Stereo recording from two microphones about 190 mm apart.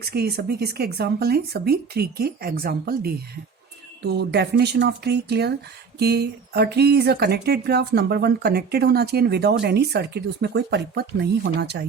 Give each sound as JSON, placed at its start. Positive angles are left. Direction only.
{"t": 0.0, "sound": "a woman's voice", "side_deg": -55}